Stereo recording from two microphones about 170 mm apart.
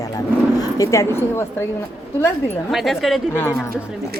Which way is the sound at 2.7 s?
Centre (ahead or behind).